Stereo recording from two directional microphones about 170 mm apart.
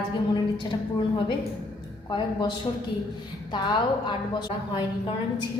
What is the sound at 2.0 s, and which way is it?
A woman's voice, 25° left (ahead or behind).